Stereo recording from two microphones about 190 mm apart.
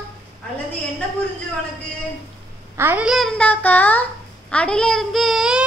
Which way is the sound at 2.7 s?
10° right (ahead or behind).